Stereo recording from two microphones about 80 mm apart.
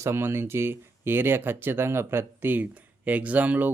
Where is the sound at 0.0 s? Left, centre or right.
Right.